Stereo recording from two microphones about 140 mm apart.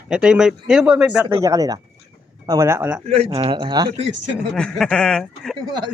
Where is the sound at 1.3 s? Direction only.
25° right (ahead or behind).